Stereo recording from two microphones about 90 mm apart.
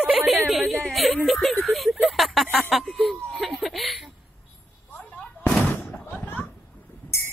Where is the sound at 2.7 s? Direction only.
Centre (ahead or behind).